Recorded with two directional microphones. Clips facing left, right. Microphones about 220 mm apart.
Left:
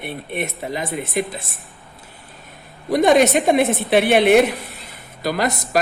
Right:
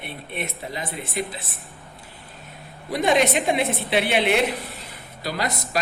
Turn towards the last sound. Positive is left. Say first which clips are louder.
# left 6 dB
turn(degrees=50)  # may be behind; listen again after turning